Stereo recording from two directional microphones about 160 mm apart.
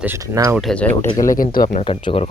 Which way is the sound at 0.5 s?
Centre (ahead or behind).